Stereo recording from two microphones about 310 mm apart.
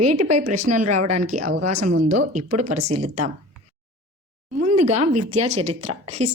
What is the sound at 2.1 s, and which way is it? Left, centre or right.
Speech, right.